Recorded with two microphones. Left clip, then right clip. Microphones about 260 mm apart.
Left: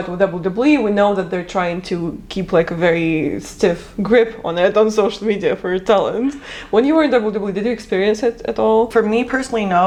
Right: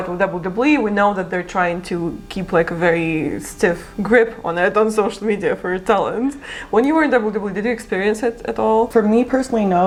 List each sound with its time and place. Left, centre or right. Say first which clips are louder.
0.2 s speech: left 3 dB; right
8.9 s speech: even; left